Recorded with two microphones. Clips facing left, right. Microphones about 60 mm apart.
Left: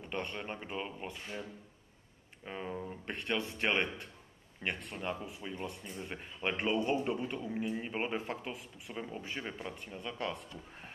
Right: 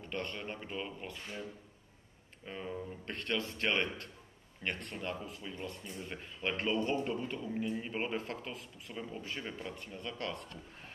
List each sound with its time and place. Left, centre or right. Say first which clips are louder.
0.1 s a man's voice: left 1 dB; centre
2.4 s a man's voice: left 1 dB; centre